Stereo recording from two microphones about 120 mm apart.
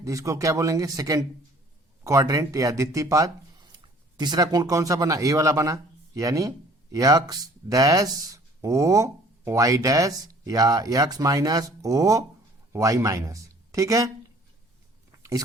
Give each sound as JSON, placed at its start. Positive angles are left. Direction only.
{"t": 0.0, "sound": "speech", "side_deg": -25}
{"t": 15.2, "sound": "biting", "side_deg": -30}